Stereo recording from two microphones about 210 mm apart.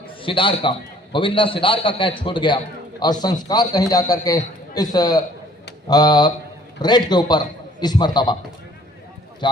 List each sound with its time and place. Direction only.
0.2 s a man's voice: 25° left (ahead or behind)
9.4 s a man's voice: 20° left (ahead or behind)